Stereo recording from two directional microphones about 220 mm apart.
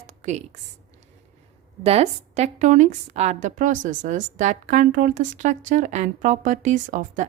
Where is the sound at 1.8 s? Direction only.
25° right (ahead or behind).